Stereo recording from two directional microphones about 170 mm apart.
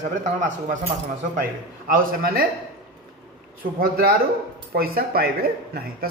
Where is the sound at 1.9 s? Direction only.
60° right (ahead or behind).